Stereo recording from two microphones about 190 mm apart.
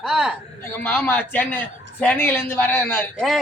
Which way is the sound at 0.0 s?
Centre (ahead or behind).